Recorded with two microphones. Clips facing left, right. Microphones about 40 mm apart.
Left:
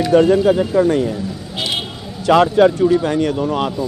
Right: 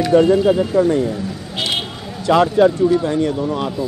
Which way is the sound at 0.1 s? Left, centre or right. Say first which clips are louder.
Left 1 dB; left.